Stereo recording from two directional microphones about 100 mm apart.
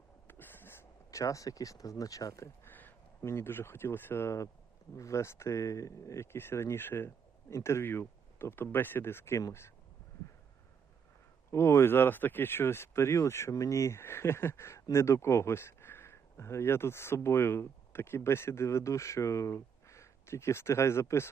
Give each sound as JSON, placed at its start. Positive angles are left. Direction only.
{"t": 0.3, "sound": "a sound", "side_deg": 20}
{"t": 1.2, "sound": "speech", "side_deg": 35}
{"t": 11.5, "sound": "speech", "side_deg": 25}